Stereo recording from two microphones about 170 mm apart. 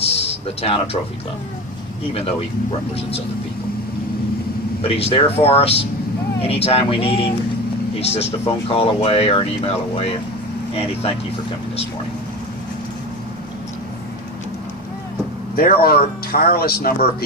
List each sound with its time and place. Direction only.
0.0 s a sound: 35° left (ahead or behind)
4.8 s speech: 35° left (ahead or behind)
15.5 s speech: 60° left (ahead or behind)